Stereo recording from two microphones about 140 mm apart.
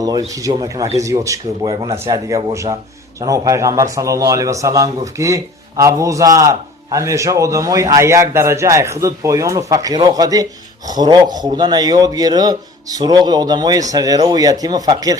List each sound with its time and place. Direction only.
0.3 s speech: 25° right (ahead or behind)